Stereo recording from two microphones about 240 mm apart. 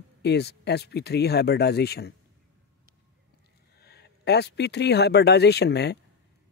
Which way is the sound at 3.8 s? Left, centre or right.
Left.